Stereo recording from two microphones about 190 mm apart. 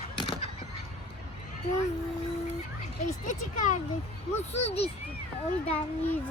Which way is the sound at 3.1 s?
40° left (ahead or behind).